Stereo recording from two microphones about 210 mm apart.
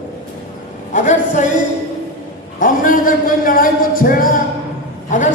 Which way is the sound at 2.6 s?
40° left (ahead or behind).